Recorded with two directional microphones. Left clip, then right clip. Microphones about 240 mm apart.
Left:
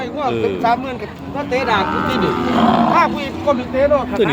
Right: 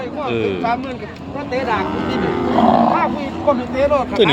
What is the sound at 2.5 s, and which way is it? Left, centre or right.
Speech, left.